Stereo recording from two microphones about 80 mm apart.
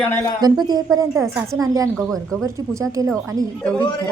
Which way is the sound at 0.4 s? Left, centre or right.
Right.